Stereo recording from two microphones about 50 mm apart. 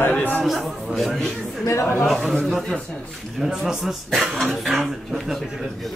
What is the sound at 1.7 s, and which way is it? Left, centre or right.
Speech, left.